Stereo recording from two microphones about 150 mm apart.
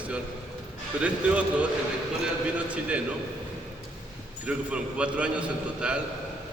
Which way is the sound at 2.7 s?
10° right (ahead or behind).